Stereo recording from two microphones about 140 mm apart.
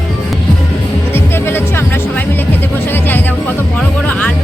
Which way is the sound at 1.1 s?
15° left (ahead or behind).